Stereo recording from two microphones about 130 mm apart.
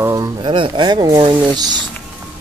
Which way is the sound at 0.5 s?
40° right (ahead or behind).